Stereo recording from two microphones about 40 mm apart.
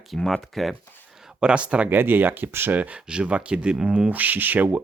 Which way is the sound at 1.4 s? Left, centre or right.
Right.